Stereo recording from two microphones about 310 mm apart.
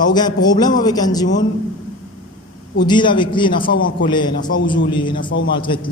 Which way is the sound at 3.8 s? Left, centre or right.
Left.